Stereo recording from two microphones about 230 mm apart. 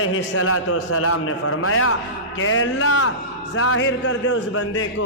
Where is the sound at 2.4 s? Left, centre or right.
Left.